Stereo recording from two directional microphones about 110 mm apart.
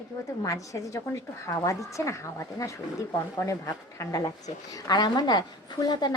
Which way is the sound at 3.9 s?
25° left (ahead or behind).